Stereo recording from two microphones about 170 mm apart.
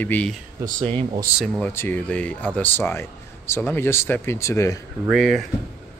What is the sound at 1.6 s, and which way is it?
Speech, 10° left (ahead or behind).